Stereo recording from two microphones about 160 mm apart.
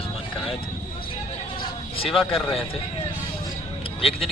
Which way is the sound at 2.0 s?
Centre (ahead or behind).